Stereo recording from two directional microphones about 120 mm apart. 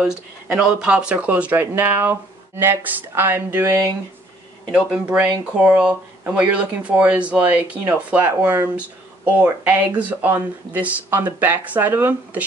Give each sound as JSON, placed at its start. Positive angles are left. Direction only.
{"t": 0.5, "sound": "speech", "side_deg": -5}
{"t": 4.6, "sound": "speech", "side_deg": -5}